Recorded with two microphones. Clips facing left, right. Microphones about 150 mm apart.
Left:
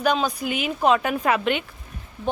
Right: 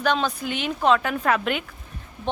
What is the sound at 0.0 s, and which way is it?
A woman's voice, 10° left (ahead or behind).